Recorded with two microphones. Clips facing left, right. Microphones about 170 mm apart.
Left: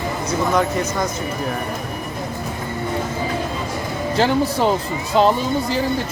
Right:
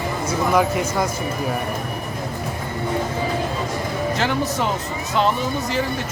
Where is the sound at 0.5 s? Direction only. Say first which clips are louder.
Right 3 dB; 5° right (ahead or behind).